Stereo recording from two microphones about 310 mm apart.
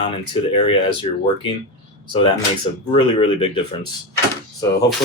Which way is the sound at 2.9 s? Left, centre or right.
Centre.